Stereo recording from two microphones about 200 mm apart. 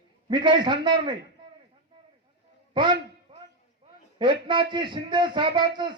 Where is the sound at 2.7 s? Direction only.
25° right (ahead or behind).